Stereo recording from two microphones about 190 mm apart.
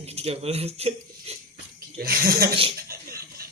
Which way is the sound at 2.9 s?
50° right (ahead or behind).